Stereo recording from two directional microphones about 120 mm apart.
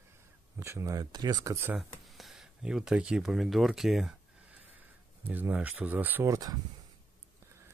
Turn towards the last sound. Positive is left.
turn(degrees=-30)  # may be behind; listen again after turning